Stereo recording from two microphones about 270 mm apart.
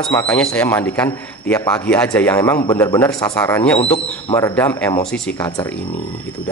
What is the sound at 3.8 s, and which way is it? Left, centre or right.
Speech, left.